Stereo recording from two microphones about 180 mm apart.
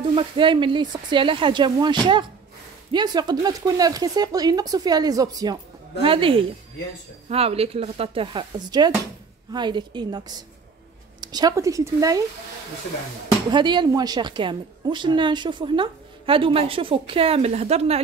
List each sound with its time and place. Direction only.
0.1 s a woman's voice: 25° right (ahead or behind)
13.5 s a woman's voice: 25° right (ahead or behind)